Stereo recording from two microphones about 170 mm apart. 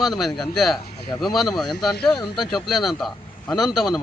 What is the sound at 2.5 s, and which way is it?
A man's voice, centre (ahead or behind).